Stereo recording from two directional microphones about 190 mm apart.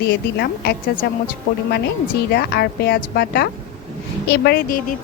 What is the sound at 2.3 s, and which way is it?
A woman's voice, 55° left (ahead or behind).